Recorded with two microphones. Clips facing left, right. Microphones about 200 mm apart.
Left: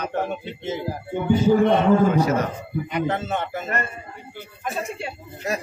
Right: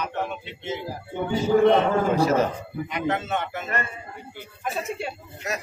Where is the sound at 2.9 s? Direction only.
35° left (ahead or behind).